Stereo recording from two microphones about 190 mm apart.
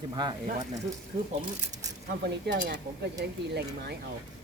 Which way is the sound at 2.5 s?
55° right (ahead or behind).